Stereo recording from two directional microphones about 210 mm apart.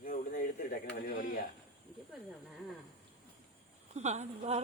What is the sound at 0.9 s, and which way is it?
Speech, 45° left (ahead or behind).